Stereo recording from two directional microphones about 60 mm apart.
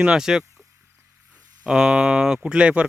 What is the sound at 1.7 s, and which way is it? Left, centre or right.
Speech, centre.